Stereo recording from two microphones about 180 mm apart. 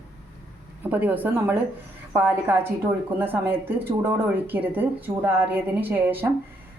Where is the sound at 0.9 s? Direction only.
10° right (ahead or behind).